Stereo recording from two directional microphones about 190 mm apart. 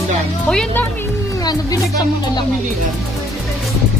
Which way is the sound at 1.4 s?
20° left (ahead or behind).